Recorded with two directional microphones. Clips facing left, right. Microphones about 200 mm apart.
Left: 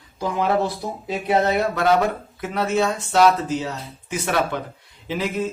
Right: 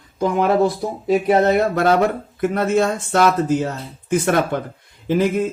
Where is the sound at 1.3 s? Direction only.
45° right (ahead or behind).